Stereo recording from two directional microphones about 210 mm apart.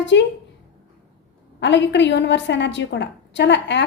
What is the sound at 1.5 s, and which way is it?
A woman's voice, 55° left (ahead or behind).